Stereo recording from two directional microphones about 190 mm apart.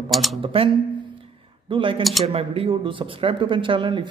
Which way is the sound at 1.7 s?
25° right (ahead or behind).